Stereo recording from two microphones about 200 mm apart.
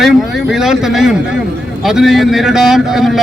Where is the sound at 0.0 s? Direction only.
Centre (ahead or behind).